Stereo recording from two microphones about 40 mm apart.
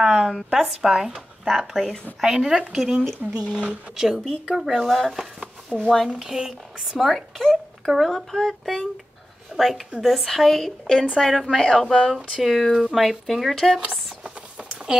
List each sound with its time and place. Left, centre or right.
0.0 s speech: centre
1.1 s a sound: centre
1.7 s speech: centre
2.3 s speech: centre
3.3 s speech: right
4.2 s speech: centre
5.7 s speech: right
6.0 s speech: centre